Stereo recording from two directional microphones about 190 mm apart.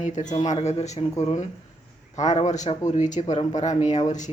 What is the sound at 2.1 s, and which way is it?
Speech, 40° left (ahead or behind).